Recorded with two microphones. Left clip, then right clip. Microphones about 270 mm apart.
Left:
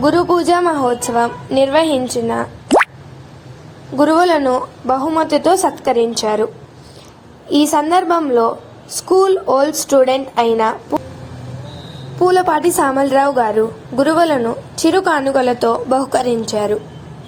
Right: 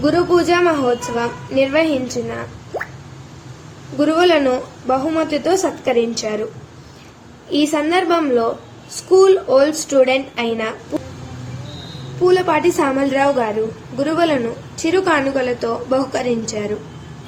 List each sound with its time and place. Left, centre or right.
0.0 s a woman's voice: left
3.9 s a woman's voice: left
7.5 s a woman's voice: left
12.2 s a woman's voice: left